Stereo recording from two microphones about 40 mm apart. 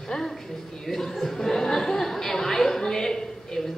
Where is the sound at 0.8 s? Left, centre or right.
Centre.